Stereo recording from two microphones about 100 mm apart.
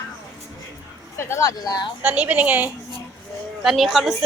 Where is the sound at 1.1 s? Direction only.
25° left (ahead or behind).